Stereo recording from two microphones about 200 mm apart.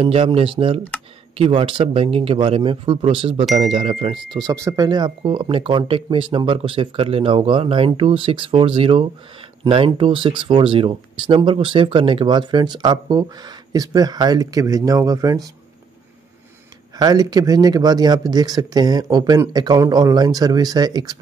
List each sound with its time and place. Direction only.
0.0 s speech: 30° right (ahead or behind)
4.5 s speech: 15° right (ahead or behind)
17.0 s speech: 20° right (ahead or behind)